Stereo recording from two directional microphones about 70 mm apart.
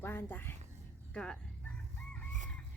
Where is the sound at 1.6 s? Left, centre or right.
Centre.